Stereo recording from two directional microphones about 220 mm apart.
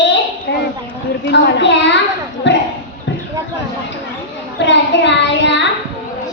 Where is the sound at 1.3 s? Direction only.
50° left (ahead or behind).